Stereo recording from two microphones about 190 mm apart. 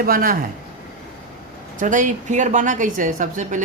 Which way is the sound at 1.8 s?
40° right (ahead or behind).